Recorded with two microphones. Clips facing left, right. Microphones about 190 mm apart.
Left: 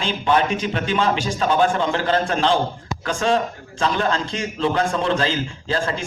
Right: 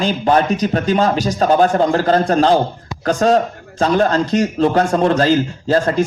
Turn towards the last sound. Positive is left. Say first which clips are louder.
# right 8 dB
turn(degrees=-40)  # may be behind; listen again after turning